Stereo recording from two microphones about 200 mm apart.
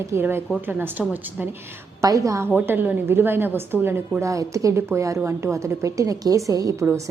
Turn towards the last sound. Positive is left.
turn(degrees=-15)  # may be behind; listen again after turning